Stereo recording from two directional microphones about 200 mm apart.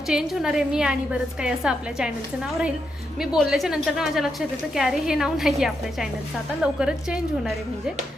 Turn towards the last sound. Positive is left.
turn(degrees=-5)  # may be behind; listen again after turning